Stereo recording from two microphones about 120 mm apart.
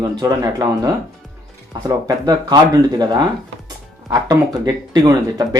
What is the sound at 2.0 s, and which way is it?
Speech, 30° right (ahead or behind).